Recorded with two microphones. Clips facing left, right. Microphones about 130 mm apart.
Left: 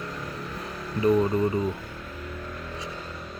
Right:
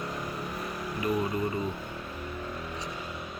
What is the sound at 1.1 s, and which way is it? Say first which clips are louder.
Speech: left 7 dB; 10° right (ahead or behind).